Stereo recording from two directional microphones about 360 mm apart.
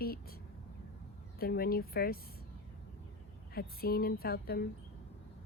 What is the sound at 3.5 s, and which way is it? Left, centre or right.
Speech, left.